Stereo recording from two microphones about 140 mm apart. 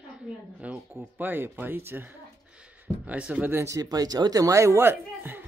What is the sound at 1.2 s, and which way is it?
Speech, 15° right (ahead or behind).